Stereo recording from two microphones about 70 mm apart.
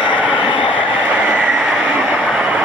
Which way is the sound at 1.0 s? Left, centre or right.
Right.